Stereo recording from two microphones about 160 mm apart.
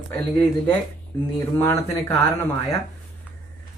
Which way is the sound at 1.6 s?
15° left (ahead or behind).